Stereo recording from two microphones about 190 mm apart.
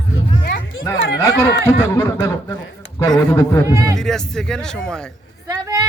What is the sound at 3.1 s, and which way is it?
Speech, 20° left (ahead or behind).